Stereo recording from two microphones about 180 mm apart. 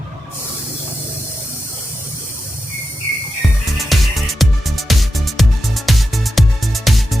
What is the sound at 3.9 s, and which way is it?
Music, centre (ahead or behind).